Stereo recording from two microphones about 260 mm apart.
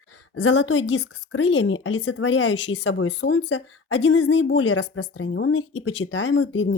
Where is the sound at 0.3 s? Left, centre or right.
Left.